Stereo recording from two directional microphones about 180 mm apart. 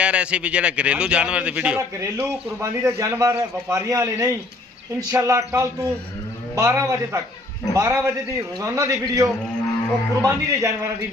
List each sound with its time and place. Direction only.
0.0 s a man's voice: 5° right (ahead or behind)